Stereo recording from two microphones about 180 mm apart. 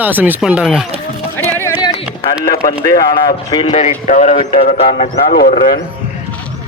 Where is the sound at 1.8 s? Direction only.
25° left (ahead or behind).